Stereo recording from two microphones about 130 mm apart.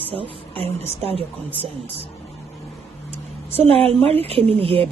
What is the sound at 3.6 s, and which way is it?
Speech, 50° right (ahead or behind).